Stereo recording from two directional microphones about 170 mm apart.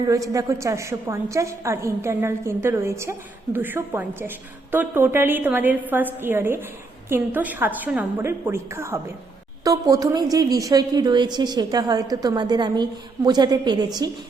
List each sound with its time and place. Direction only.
0.0 s a woman's voice: 20° right (ahead or behind)